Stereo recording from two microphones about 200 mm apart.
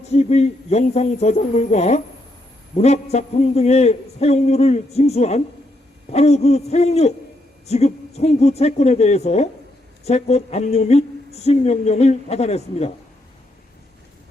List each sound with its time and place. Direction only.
0.1 s a woman's voice: 30° left (ahead or behind)